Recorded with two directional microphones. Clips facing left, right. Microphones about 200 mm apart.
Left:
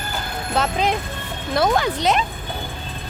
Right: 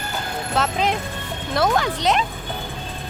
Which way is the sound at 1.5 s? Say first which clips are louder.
Left 1 dB; centre (ahead or behind).